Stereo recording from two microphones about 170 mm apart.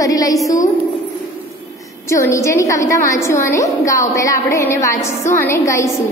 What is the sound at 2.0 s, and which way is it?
A woman's voice, 15° left (ahead or behind).